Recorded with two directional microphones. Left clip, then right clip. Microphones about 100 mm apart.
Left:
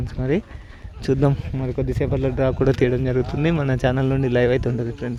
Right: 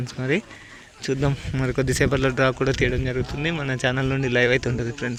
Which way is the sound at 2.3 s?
35° left (ahead or behind).